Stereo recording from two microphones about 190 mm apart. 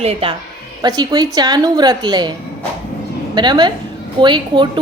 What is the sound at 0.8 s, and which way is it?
A woman's voice, 20° right (ahead or behind).